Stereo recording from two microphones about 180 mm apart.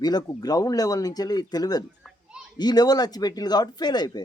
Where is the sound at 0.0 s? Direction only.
20° left (ahead or behind).